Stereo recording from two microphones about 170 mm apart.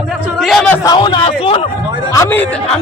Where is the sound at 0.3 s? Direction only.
Centre (ahead or behind).